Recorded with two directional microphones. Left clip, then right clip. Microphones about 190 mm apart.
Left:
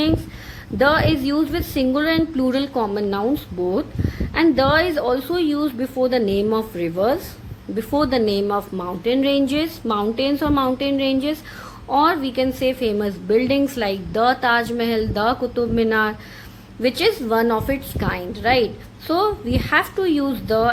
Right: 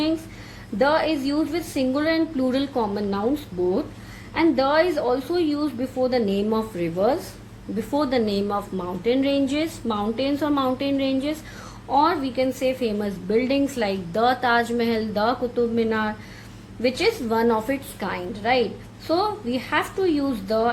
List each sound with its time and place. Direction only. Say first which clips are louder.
0.8 s a woman's voice: left 3 dB; 40° left (ahead or behind)